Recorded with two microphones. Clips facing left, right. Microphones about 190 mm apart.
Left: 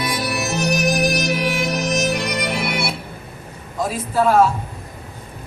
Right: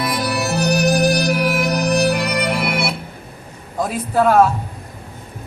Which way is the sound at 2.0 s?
60° right (ahead or behind).